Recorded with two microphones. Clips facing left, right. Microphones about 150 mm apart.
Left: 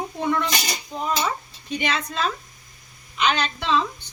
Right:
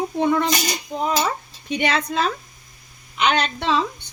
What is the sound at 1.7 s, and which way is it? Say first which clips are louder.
A woman's voice: right 4 dB; 70° right (ahead or behind).